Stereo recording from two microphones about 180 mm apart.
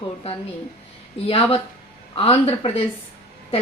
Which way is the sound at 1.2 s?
35° left (ahead or behind).